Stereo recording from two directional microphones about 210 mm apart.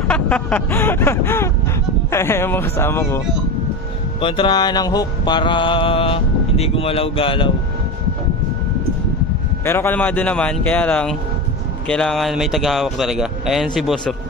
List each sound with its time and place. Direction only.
0.1 s speech: 5° left (ahead or behind)
4.2 s mantra: 25° left (ahead or behind)
9.7 s speech: 10° left (ahead or behind)